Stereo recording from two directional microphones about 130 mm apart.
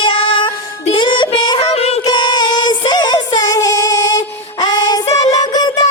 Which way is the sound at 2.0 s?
35° left (ahead or behind).